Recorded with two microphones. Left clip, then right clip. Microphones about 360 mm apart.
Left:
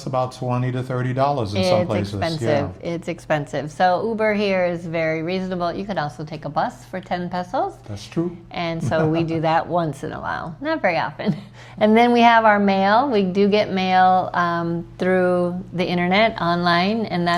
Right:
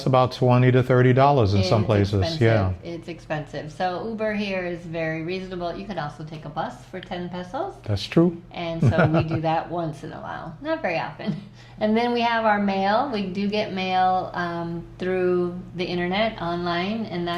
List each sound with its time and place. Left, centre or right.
0.0 s speech: right
2.8 s a woman's voice: left
8.2 s a woman's voice: right
8.5 s a woman's voice: left